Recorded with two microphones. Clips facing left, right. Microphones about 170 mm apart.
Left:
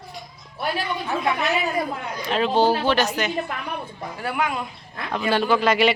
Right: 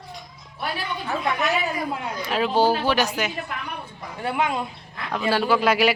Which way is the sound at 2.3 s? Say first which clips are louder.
Left 1 dB; 5° right (ahead or behind).